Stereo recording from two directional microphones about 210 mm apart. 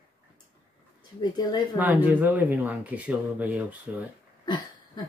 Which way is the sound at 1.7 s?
10° right (ahead or behind).